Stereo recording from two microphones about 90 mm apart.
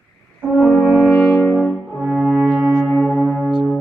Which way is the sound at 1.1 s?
10° left (ahead or behind).